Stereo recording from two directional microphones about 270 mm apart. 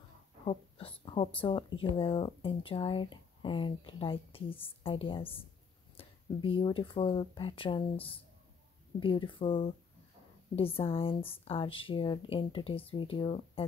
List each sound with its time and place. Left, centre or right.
0.5 s speech: left